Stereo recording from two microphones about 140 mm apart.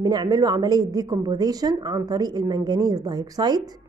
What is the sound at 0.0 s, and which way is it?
A woman's voice, 30° right (ahead or behind).